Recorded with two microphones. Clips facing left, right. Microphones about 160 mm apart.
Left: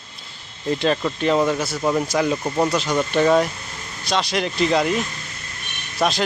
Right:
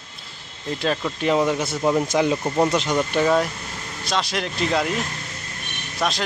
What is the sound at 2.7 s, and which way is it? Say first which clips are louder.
Speech: even; 20° right (ahead or behind).